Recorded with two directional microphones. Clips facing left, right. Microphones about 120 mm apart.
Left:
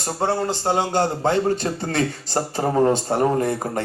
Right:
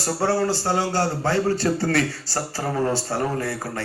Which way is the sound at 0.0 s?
20° left (ahead or behind).